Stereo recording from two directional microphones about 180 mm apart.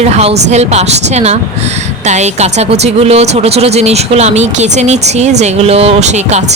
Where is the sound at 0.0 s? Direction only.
35° right (ahead or behind).